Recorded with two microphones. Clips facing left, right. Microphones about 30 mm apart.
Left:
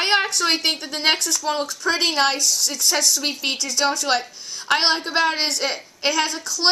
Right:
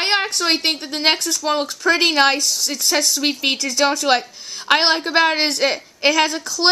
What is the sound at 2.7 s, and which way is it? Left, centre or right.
Speech, right.